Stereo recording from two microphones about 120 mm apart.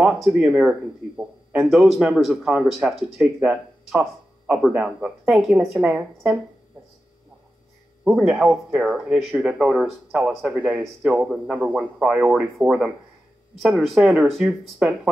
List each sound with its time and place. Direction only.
0.0 s speech: 5° right (ahead or behind)
8.0 s speech: 5° right (ahead or behind)